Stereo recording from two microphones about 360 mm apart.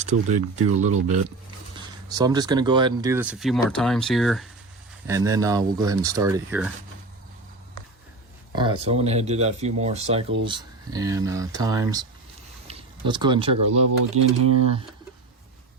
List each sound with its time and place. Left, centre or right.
0.0 s speech: centre
8.5 s speech: centre
14.2 s speech: right